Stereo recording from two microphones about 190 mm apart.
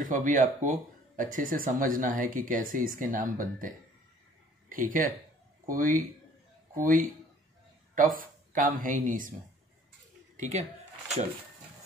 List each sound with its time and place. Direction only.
0.0 s speech: 45° right (ahead or behind)
10.3 s speech: 40° right (ahead or behind)